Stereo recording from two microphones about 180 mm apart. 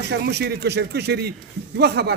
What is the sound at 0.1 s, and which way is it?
A man's voice, 65° right (ahead or behind).